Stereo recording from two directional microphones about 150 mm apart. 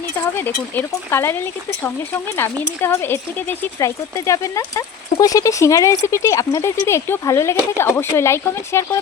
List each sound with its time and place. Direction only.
0.3 s speech: 15° left (ahead or behind)
2.8 s speech: 15° left (ahead or behind)